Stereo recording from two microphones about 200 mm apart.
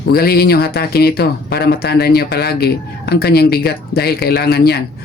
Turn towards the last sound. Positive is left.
turn(degrees=50)  # may be behind; listen again after turning